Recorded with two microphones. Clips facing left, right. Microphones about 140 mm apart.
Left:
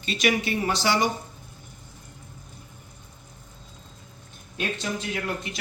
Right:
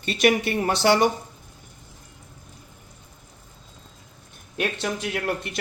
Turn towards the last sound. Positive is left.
turn(degrees=-60)  # may be behind; listen again after turning